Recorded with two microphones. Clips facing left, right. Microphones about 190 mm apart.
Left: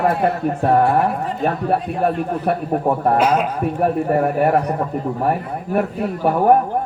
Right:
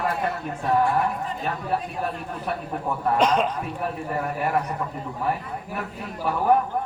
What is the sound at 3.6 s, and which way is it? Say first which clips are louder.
A man's voice: left 11 dB; 55° left (ahead or behind).